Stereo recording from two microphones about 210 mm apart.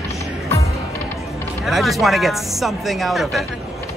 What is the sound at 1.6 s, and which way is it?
Speech, centre (ahead or behind).